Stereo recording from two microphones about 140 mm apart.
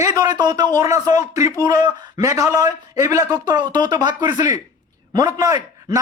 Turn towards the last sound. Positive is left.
turn(degrees=-25)  # may be behind; listen again after turning